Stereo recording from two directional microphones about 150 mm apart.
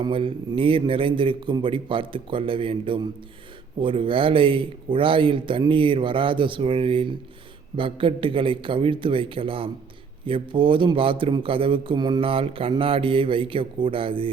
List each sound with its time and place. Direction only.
0.0 s a man's voice: 35° right (ahead or behind)